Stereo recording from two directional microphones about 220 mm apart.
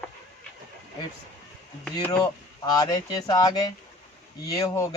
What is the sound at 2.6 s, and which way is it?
Speech, 15° left (ahead or behind).